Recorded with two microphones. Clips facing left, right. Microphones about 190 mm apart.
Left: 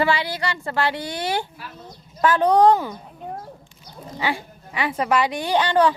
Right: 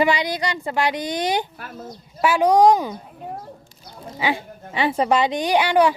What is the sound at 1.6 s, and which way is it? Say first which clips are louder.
Speech: right 3 dB; 50° right (ahead or behind).